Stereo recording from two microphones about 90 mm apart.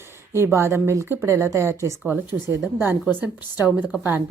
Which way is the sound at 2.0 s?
15° right (ahead or behind).